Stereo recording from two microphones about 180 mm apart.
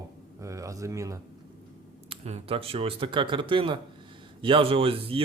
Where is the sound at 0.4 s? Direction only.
15° right (ahead or behind).